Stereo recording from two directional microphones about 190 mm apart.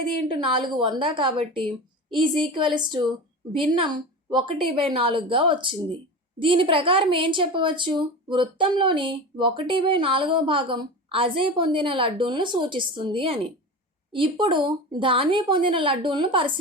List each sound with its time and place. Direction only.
0.3 s a woman's voice: 25° right (ahead or behind)